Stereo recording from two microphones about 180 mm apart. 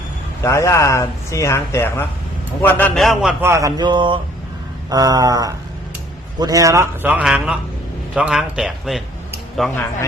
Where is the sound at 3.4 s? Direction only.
15° right (ahead or behind); by 9.8 s centre (ahead or behind).